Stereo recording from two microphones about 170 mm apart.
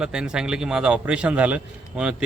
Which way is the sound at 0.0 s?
5° right (ahead or behind).